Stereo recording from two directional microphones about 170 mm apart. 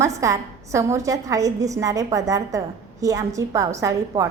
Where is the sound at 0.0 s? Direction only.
20° right (ahead or behind).